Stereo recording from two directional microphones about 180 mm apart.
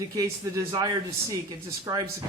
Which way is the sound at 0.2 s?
20° right (ahead or behind).